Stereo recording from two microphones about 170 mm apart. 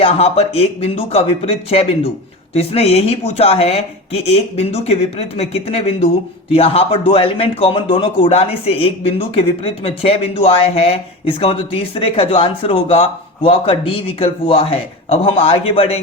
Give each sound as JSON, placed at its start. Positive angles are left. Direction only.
{"t": 0.0, "sound": "a man's voice", "side_deg": 35}